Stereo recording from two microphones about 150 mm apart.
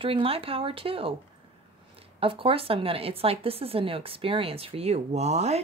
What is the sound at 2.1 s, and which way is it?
A woman's voice, 35° right (ahead or behind).